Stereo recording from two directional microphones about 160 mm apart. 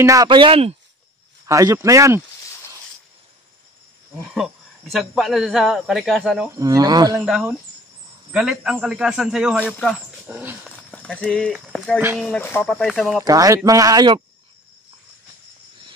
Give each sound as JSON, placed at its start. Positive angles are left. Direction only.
{"t": 0.0, "sound": "speech", "side_deg": -20}
{"t": 1.4, "sound": "speech", "side_deg": -20}
{"t": 4.3, "sound": "speech", "side_deg": 0}
{"t": 6.5, "sound": "speech", "side_deg": -20}
{"t": 7.2, "sound": "speech", "side_deg": -5}
{"t": 10.2, "sound": "dog", "side_deg": -10}
{"t": 10.8, "sound": "speech", "side_deg": 5}
{"t": 13.2, "sound": "speech", "side_deg": -20}